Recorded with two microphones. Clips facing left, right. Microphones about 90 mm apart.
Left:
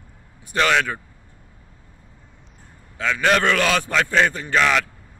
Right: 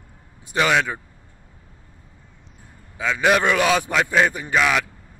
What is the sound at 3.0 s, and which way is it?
A man's voice, 10° right (ahead or behind).